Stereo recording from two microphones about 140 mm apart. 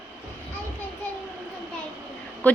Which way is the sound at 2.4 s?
10° left (ahead or behind).